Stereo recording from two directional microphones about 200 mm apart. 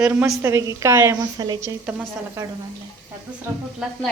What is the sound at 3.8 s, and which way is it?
Speech, 5° right (ahead or behind).